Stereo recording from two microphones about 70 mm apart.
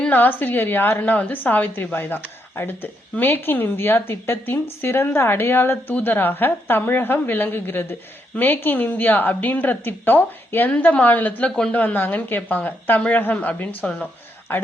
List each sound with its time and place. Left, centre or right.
0.1 s a woman's voice: left
11.8 s a woman's voice: left